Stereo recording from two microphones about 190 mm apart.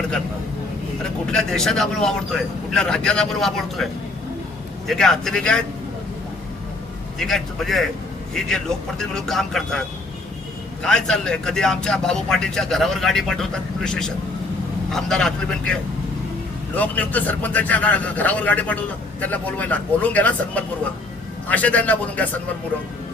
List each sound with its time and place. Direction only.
1.3 s speech: 5° left (ahead or behind)
4.9 s speech: centre (ahead or behind)
7.2 s speech: centre (ahead or behind)
10.8 s speech: 5° left (ahead or behind)